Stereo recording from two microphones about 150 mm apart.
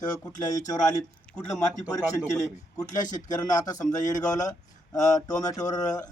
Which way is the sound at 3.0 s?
55° left (ahead or behind).